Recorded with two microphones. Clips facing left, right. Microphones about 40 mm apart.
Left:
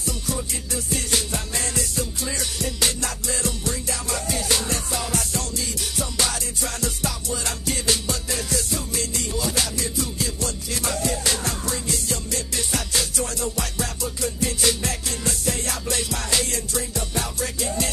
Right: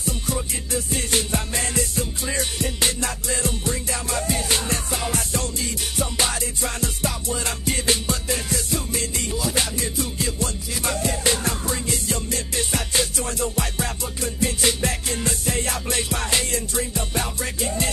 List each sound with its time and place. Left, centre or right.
0.0 s music: right